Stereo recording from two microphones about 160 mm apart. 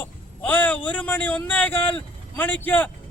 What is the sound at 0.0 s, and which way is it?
A man's voice, 10° left (ahead or behind).